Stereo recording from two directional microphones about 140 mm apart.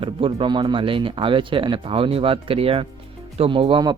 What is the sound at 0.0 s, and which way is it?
Speech, 40° right (ahead or behind).